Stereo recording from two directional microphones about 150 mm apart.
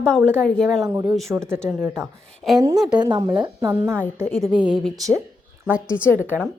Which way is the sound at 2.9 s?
25° right (ahead or behind).